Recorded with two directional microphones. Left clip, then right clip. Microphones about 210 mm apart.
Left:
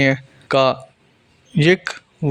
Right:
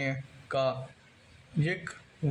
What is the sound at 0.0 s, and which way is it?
Speech, 45° left (ahead or behind).